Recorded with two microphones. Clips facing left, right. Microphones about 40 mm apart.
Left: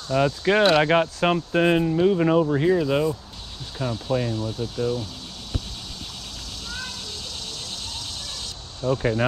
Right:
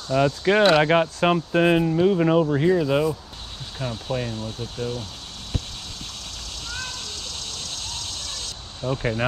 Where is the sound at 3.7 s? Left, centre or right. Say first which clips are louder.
Left 3 dB; centre.